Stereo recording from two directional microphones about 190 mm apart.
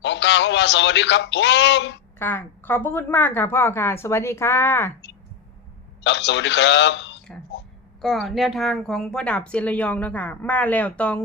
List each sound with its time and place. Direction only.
0.0 s a man's voice: 65° left (ahead or behind)
2.1 s speech: 10° left (ahead or behind)
6.0 s a man's voice: 65° left (ahead or behind)
8.0 s speech: centre (ahead or behind)